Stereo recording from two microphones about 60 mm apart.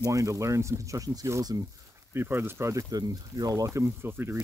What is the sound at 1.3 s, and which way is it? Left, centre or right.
Speech, right.